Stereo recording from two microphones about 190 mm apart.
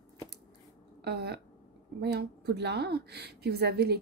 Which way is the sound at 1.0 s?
60° right (ahead or behind).